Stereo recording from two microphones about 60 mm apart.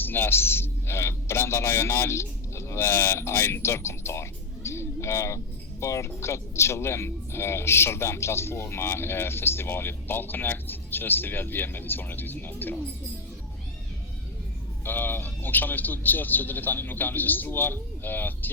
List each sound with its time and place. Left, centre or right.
0.0 s speech: left
14.8 s speech: left